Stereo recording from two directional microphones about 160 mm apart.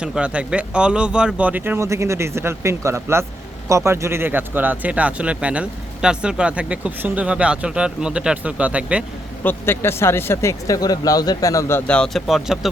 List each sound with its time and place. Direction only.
0.0 s speech: 5° right (ahead or behind)
9.4 s speech: 15° left (ahead or behind)
11.9 s speech: 5° left (ahead or behind)